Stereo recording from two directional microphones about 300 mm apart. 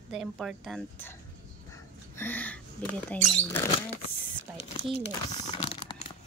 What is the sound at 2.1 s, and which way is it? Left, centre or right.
Speech, centre.